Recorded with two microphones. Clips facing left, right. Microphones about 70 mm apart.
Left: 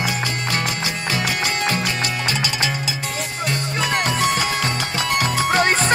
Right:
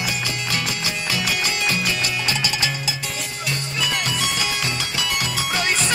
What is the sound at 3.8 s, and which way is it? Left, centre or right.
Music, left.